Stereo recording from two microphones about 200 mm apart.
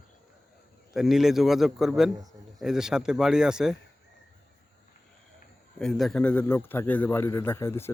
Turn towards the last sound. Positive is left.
turn(degrees=15)  # may be behind; listen again after turning